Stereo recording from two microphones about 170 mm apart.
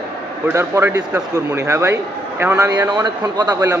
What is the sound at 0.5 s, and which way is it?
A man's voice, 15° right (ahead or behind).